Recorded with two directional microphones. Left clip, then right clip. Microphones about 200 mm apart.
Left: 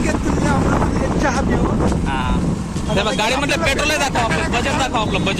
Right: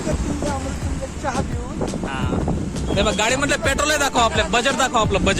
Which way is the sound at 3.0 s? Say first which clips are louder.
Left 1 dB; 30° right (ahead or behind).